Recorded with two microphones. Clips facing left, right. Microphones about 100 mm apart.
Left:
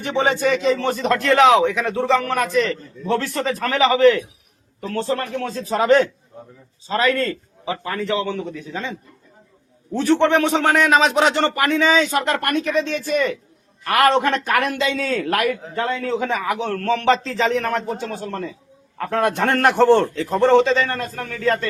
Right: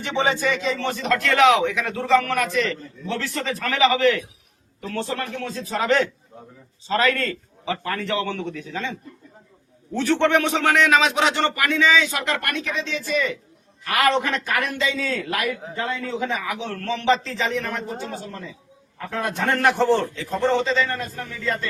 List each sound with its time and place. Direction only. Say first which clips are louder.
0.3 s a man's voice: left 3 dB; 60° left (ahead or behind)
0.7 s a man's voice: left 4 dB; 40° left (ahead or behind); by 21.7 s 60° left (ahead or behind)